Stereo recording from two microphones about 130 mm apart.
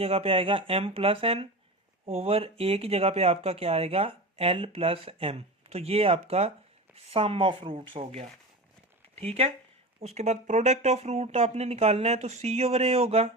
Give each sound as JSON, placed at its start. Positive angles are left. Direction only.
{"t": 0.0, "sound": "speech", "side_deg": -50}